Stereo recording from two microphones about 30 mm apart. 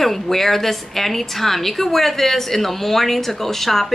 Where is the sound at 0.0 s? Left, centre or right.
Centre.